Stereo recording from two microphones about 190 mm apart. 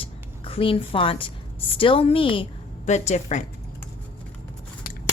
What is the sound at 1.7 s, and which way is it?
A woman's voice, 30° left (ahead or behind).